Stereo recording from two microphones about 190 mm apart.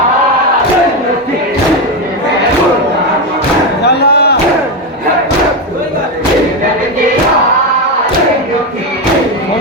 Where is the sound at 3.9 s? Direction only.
55° left (ahead or behind).